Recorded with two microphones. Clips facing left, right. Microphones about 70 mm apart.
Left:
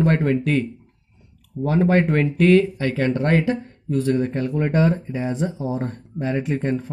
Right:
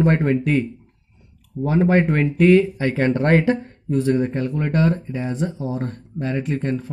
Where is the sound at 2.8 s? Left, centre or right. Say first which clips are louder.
Right 2 dB; right.